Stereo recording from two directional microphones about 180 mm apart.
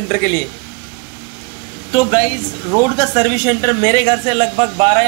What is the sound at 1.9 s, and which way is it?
A woman's voice, 15° right (ahead or behind).